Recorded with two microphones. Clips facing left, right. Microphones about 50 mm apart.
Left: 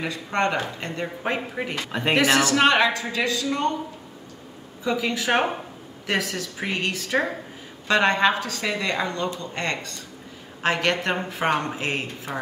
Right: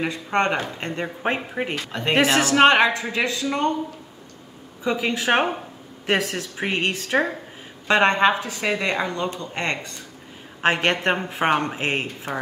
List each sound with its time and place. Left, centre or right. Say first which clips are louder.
0.0 s speech: right 2 dB; right
4.8 s a woman's voice: right 2 dB; right